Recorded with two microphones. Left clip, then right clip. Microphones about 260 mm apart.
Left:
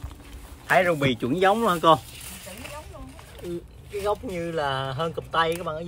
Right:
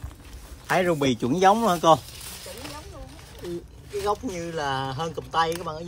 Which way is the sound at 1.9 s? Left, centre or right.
Right.